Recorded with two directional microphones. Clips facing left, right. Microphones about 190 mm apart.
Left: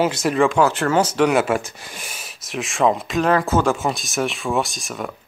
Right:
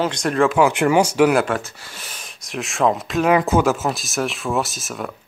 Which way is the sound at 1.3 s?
5° left (ahead or behind).